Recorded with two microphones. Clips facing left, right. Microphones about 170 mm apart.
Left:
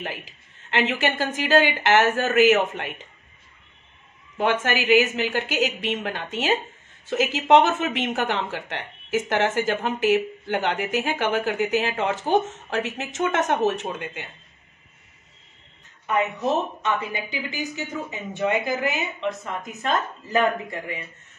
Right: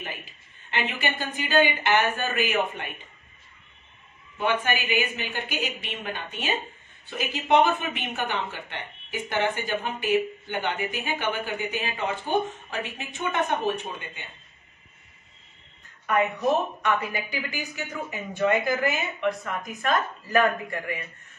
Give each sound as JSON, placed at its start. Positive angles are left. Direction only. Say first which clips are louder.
{"t": 0.0, "sound": "speech", "louder": "left 5 dB", "side_deg": 90}
{"t": 4.4, "sound": "speech", "louder": "left 3 dB", "side_deg": 90}
{"t": 16.8, "sound": "a woman's voice", "louder": "even", "side_deg": 20}